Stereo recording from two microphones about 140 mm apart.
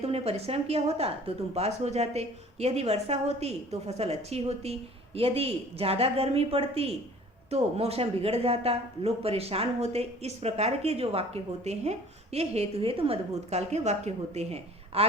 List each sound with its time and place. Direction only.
0.0 s speech: 45° right (ahead or behind)